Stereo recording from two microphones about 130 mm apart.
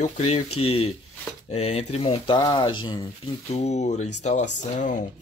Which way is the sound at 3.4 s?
55° left (ahead or behind).